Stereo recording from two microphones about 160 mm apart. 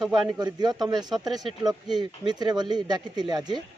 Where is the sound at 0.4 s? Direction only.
25° right (ahead or behind).